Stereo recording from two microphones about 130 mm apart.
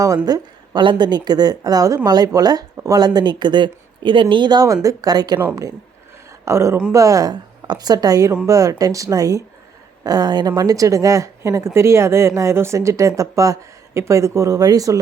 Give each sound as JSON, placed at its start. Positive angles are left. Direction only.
{"t": 0.3, "sound": "speech", "side_deg": -30}
{"t": 6.4, "sound": "a woman's voice", "side_deg": -20}